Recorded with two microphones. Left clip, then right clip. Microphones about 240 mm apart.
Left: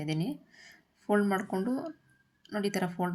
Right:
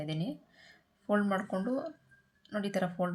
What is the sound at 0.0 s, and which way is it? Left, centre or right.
Speech, centre.